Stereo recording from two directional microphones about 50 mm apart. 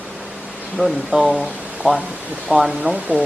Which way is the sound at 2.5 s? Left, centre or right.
Centre.